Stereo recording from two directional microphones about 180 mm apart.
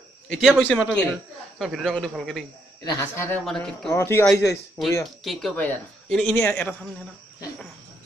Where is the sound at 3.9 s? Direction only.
15° left (ahead or behind).